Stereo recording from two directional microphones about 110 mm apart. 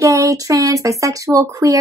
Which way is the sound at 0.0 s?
30° right (ahead or behind).